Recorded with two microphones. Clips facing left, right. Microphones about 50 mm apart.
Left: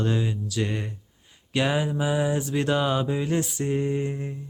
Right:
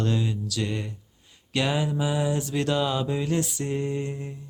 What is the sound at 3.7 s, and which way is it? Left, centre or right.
Mantra, centre.